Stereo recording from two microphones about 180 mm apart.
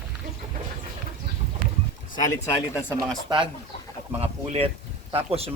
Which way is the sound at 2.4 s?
15° left (ahead or behind).